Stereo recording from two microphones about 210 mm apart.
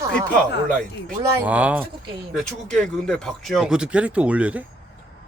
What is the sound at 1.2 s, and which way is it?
Speech, 10° right (ahead or behind).